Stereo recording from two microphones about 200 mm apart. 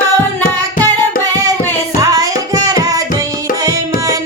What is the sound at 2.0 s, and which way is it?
Music, 15° right (ahead or behind).